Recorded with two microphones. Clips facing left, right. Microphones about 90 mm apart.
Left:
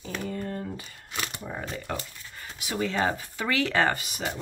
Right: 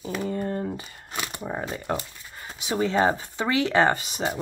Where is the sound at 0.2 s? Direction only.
30° right (ahead or behind).